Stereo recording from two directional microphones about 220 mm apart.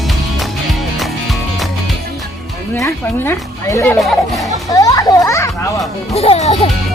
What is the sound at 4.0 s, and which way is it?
Speech, centre (ahead or behind).